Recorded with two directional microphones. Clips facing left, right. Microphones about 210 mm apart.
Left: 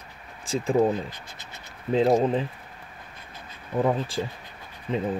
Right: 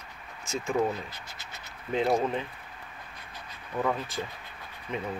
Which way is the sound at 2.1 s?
30° left (ahead or behind).